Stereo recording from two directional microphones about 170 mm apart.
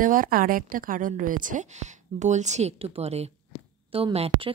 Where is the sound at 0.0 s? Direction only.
55° right (ahead or behind).